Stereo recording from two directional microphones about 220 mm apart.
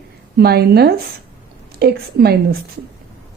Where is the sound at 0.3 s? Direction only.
45° right (ahead or behind).